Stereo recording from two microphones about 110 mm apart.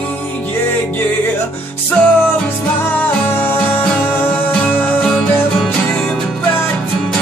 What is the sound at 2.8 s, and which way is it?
Music, 15° left (ahead or behind).